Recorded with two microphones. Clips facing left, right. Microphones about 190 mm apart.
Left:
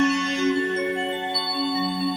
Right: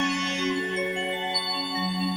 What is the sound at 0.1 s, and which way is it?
Music, 60° left (ahead or behind).